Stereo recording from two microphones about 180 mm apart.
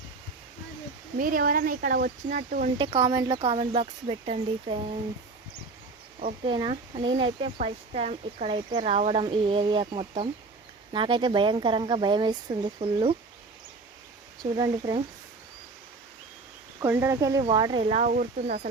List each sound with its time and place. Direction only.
1.2 s speech: 50° right (ahead or behind)
2.7 s speech: 25° right (ahead or behind)
6.4 s speech: 30° right (ahead or behind)
14.4 s speech: 25° right (ahead or behind)
16.8 s speech: 15° right (ahead or behind)
17.8 s speech: 40° right (ahead or behind)